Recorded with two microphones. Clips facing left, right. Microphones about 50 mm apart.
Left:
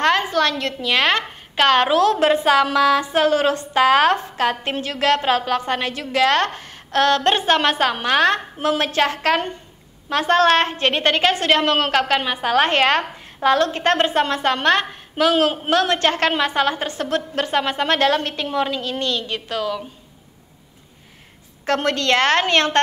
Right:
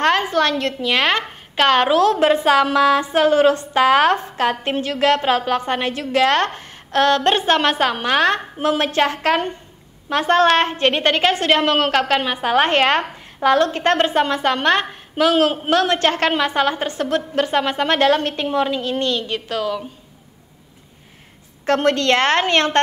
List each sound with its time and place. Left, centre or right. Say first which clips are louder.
0.0 s a woman's voice: right 1 dB; right
1.2 s a sound: even; centre
1.7 s a woman's voice: right 1 dB; centre
12.0 s a woman's voice: right 1 dB; centre
12.5 s a woman's voice: right 1 dB; right
14.9 s a woman's voice: right 1 dB; centre
15.7 s a woman's voice: even; right
19.6 s a woman's voice: right 1 dB; centre
21.6 s a woman's voice: right 3 dB; right